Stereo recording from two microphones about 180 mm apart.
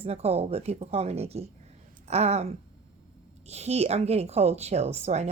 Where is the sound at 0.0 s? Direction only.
35° right (ahead or behind).